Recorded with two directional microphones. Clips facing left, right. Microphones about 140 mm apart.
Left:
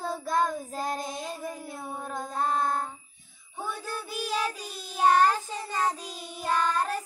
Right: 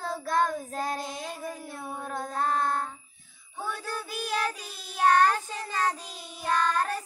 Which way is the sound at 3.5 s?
15° left (ahead or behind).